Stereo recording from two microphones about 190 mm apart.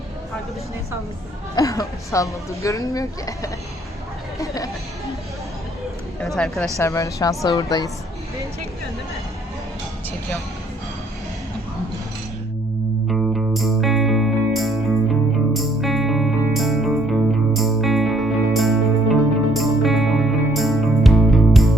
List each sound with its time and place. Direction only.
1.5 s a woman's voice: 15° left (ahead or behind)
6.1 s speech: centre (ahead or behind)
6.7 s a woman's voice: 15° left (ahead or behind)
13.1 s music: centre (ahead or behind)